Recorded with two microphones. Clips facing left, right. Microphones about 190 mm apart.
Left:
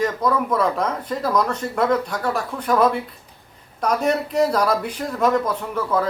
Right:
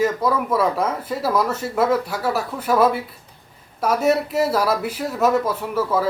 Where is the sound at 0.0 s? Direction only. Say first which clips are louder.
Right 1 dB; 5° right (ahead or behind).